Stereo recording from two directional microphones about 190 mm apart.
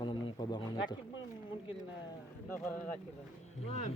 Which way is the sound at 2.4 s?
10° left (ahead or behind).